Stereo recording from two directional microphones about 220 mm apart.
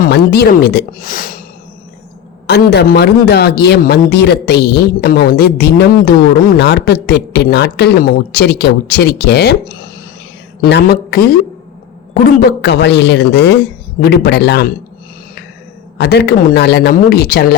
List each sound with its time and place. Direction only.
0.0 s a man's voice: 50° left (ahead or behind)
2.5 s a man's voice: 45° left (ahead or behind)
12.6 s a man's voice: 50° left (ahead or behind)
16.0 s a man's voice: 50° left (ahead or behind)